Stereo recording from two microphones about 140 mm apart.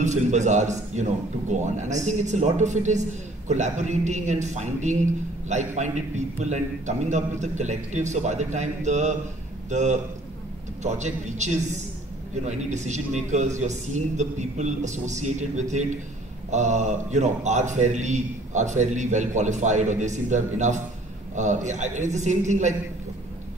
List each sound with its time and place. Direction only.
0.0 s a man's voice: 60° right (ahead or behind)